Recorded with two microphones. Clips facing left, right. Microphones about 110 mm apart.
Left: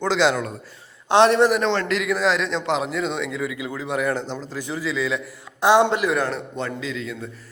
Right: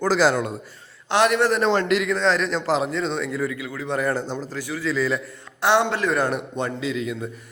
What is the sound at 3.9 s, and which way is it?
Speech, centre (ahead or behind).